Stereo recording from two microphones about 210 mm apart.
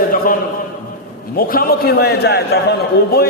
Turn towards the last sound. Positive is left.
turn(degrees=50)  # may be behind; listen again after turning